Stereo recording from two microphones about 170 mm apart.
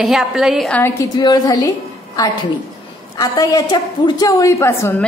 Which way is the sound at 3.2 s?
20° left (ahead or behind).